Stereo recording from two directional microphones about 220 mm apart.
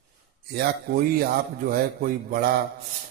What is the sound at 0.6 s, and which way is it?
A man's voice, 40° right (ahead or behind).